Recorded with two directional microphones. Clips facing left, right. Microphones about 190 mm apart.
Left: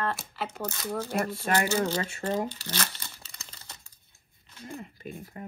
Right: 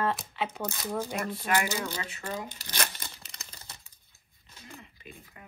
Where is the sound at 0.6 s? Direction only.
15° right (ahead or behind).